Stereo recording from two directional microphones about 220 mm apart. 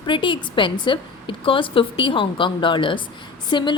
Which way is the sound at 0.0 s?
20° left (ahead or behind).